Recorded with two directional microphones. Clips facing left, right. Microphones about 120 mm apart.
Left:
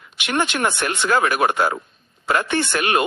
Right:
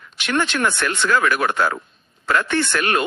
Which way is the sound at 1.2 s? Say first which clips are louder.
Left 1 dB; 45° left (ahead or behind).